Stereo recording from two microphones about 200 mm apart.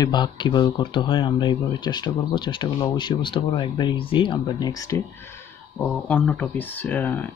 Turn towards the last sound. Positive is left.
turn(degrees=10)  # may be behind; listen again after turning